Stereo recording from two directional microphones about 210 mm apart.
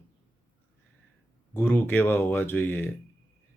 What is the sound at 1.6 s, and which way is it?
Speech, 10° left (ahead or behind).